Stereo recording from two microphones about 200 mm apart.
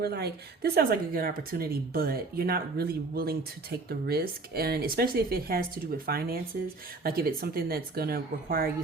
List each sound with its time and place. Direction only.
0.0 s speech: 55° right (ahead or behind)